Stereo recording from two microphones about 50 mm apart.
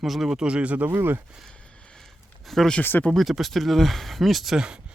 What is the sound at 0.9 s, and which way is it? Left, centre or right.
Speech, right.